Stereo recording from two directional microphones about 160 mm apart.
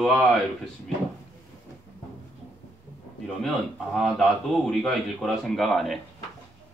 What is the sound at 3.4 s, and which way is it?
Speech, centre (ahead or behind).